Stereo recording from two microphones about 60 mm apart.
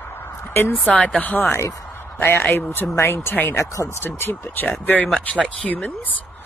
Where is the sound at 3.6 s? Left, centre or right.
Left.